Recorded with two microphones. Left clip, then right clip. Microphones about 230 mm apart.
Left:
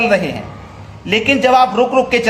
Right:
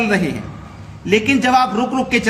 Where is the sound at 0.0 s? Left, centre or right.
Centre.